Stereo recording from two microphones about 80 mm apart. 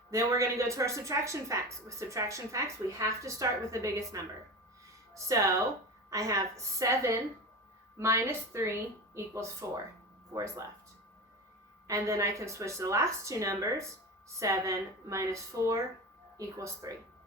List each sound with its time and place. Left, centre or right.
0.1 s a woman's voice: right
11.9 s a woman's voice: right
16.8 s a woman's voice: right